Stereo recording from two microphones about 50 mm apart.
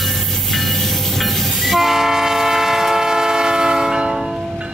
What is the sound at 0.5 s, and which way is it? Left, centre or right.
Train, centre.